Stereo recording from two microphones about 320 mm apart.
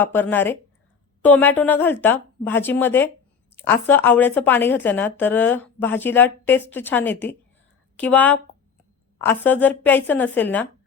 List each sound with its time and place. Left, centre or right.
0.0 s a woman's voice: centre